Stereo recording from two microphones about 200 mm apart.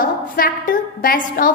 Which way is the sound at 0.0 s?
45° left (ahead or behind).